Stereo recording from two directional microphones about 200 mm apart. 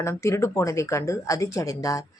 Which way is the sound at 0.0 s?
15° left (ahead or behind).